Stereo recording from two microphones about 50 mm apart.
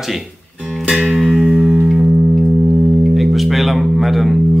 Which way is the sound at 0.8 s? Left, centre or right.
Centre.